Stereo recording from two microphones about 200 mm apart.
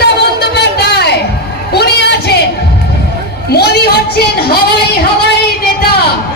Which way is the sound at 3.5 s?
55° left (ahead or behind).